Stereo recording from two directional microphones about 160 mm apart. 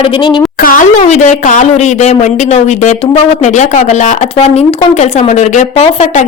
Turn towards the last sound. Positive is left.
turn(degrees=45)  # may be behind; listen again after turning